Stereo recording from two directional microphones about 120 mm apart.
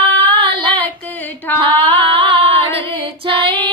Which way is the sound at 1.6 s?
50° right (ahead or behind).